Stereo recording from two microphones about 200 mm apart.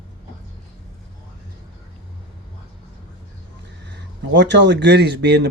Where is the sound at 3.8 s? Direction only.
60° right (ahead or behind).